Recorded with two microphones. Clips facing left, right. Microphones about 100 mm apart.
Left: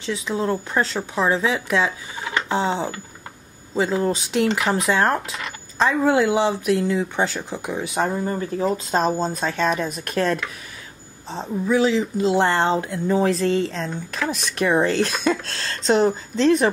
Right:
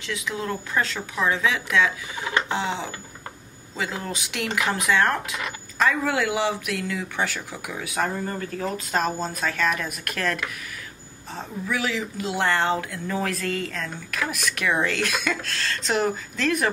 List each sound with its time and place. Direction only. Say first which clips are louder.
0.0 s speech: left 6 dB; 30° left (ahead or behind)